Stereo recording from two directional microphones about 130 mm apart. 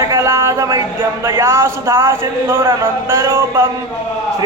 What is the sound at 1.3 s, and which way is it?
Speech, 20° right (ahead or behind).